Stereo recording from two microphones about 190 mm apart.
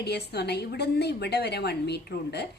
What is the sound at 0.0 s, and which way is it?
A woman's voice, 60° left (ahead or behind).